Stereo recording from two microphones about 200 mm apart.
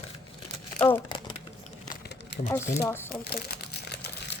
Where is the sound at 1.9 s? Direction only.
50° left (ahead or behind).